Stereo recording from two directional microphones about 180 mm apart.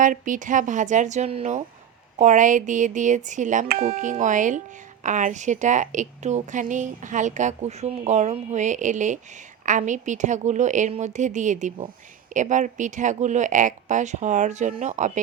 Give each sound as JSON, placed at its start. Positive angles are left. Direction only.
{"t": 0.0, "sound": "a woman's voice", "side_deg": -45}